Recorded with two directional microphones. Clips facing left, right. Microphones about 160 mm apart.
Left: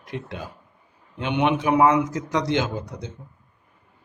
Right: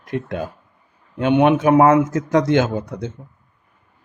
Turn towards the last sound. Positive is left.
turn(degrees=-55)  # may be behind; listen again after turning